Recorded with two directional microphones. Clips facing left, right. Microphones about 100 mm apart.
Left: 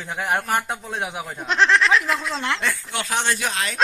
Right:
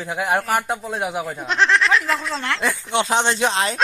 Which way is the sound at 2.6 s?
20° right (ahead or behind).